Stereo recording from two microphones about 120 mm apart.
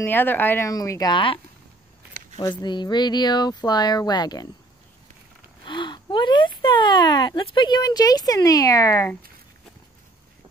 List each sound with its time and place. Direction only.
0.0 s speech: 15° left (ahead or behind)
0.7 s speech: 30° left (ahead or behind)
1.1 s speech: 45° left (ahead or behind)
5.7 s speech: 40° left (ahead or behind)